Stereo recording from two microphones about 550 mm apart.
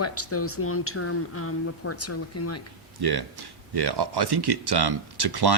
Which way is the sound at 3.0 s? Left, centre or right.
Right.